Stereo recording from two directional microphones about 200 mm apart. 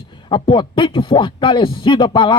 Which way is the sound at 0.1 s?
25° left (ahead or behind).